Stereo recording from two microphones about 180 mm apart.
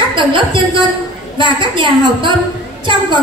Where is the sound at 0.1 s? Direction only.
25° right (ahead or behind).